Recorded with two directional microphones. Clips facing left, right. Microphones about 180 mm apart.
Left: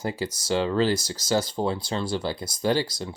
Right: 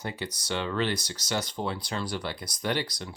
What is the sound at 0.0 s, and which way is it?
Speech, 30° left (ahead or behind).